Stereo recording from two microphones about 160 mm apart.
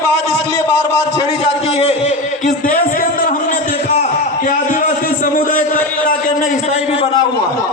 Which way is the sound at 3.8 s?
45° left (ahead or behind).